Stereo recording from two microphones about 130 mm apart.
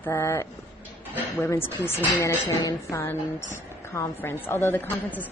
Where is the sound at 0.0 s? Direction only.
20° left (ahead or behind).